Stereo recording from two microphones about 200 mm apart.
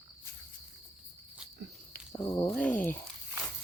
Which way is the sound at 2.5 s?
5° left (ahead or behind).